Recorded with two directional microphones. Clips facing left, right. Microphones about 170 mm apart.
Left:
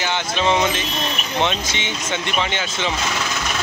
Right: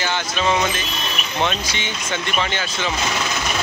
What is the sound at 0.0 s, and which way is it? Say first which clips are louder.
Speech: left 1 dB; 20° left (ahead or behind).